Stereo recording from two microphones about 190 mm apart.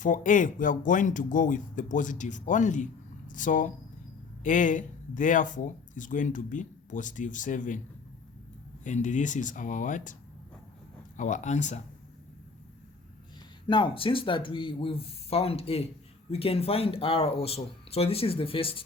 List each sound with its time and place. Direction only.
0.0 s speech: 45° left (ahead or behind)
8.8 s speech: 40° left (ahead or behind)
11.2 s speech: 40° left (ahead or behind)
13.7 s speech: 25° left (ahead or behind)